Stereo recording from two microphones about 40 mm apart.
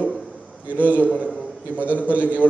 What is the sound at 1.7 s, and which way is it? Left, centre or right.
Speech, right.